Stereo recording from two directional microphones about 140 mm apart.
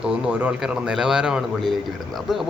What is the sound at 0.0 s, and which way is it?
A man's voice, 5° right (ahead or behind).